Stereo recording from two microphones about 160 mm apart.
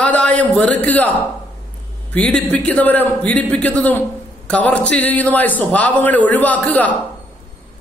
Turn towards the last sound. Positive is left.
turn(degrees=10)  # may be behind; listen again after turning